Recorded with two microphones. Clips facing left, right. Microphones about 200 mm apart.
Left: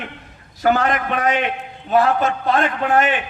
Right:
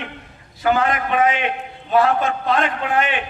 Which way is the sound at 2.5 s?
45° left (ahead or behind).